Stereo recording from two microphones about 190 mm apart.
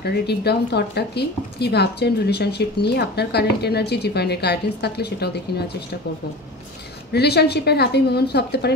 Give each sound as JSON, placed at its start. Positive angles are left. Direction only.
{"t": 0.0, "sound": "speech", "side_deg": 60}
{"t": 7.1, "sound": "speech", "side_deg": 60}